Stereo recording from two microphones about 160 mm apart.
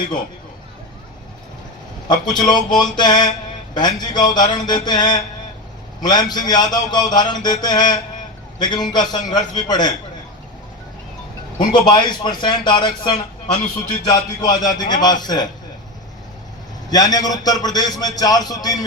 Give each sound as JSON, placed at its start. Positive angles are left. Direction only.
{"t": 2.0, "sound": "a man's voice", "side_deg": 25}
{"t": 11.6, "sound": "a man's voice", "side_deg": 30}
{"t": 16.9, "sound": "a man's voice", "side_deg": 25}